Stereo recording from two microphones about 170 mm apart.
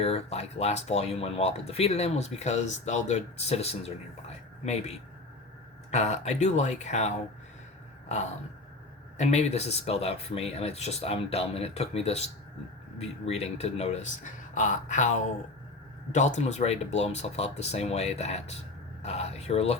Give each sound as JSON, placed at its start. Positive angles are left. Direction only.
{"t": 0.0, "sound": "speech", "side_deg": 35}
{"t": 9.1, "sound": "speech", "side_deg": 40}
{"t": 16.1, "sound": "speech", "side_deg": 45}